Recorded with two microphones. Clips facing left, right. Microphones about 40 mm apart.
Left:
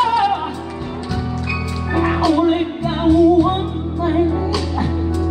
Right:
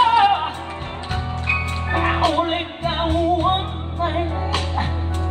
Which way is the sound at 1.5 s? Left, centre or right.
Right.